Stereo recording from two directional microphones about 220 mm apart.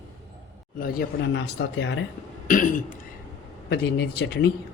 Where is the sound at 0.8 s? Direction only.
50° left (ahead or behind).